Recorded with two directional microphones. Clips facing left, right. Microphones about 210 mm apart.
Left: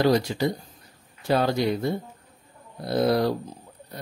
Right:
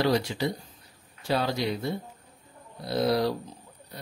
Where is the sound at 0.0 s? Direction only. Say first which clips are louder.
Left 4 dB; 45° left (ahead or behind).